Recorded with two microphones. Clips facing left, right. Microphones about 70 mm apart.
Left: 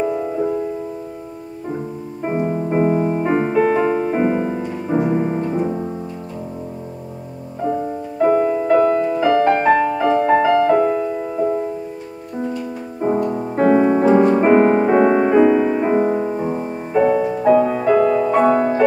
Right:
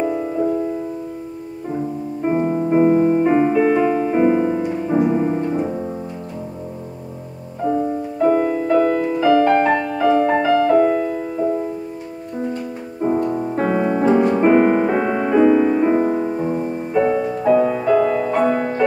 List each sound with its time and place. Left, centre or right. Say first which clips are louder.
0.0 s music: even; centre
2.2 s music: right 2 dB; centre
3.3 s music: right 1 dB; centre
4.9 s music: right 1 dB; centre
7.6 s music: right 2 dB; centre
8.2 s music: left 1 dB; centre
10.5 s music: even; left
10.8 s music: right 1 dB; centre
13.0 s music: even; centre